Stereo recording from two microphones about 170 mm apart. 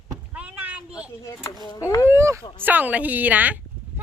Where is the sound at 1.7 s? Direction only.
20° left (ahead or behind).